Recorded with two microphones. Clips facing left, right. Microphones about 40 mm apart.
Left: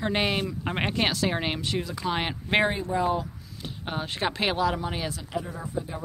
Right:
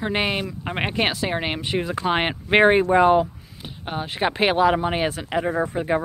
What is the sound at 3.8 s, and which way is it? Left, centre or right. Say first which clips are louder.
Speech: right 5 dB; centre.